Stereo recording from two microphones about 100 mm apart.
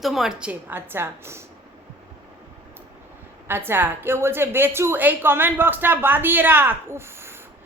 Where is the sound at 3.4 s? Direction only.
20° right (ahead or behind).